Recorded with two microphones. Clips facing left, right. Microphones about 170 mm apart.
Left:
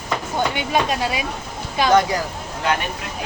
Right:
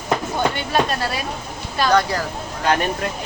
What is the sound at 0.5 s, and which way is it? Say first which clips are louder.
Speech: even; 15° left (ahead or behind).